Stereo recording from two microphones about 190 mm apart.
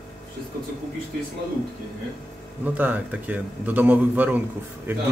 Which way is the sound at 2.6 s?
10° right (ahead or behind).